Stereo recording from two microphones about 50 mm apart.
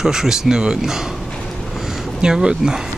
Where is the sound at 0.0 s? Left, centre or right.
Centre.